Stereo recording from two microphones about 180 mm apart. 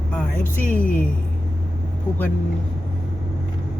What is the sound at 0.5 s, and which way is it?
Speech, 10° left (ahead or behind).